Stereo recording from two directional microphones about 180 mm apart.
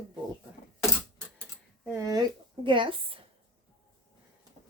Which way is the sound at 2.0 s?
20° right (ahead or behind).